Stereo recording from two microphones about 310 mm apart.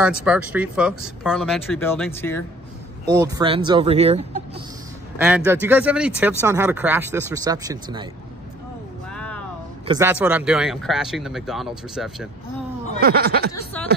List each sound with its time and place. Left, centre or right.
0.0 s speech: centre
3.1 s speech: centre
5.2 s speech: centre
9.1 s a sound: centre
9.8 s speech: centre
13.0 s speech: right
13.5 s speech: centre